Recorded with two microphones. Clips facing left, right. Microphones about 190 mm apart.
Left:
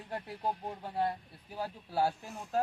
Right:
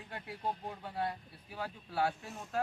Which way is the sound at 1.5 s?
35° left (ahead or behind).